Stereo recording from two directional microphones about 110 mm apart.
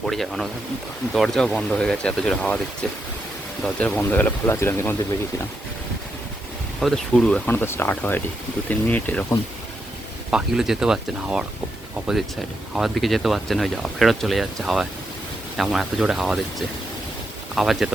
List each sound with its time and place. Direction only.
0.0 s speech: centre (ahead or behind); by 4.9 s 25° left (ahead or behind)
6.7 s speech: centre (ahead or behind)
10.3 s speech: 5° right (ahead or behind)
12.7 s speech: centre (ahead or behind)
17.5 s speech: centre (ahead or behind)